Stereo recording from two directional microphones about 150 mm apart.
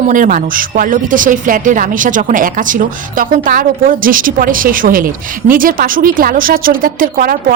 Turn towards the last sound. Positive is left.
turn(degrees=-70)  # may be behind; listen again after turning